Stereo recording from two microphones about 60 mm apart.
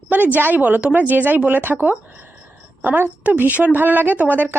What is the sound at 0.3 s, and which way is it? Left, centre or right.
A woman's voice, right.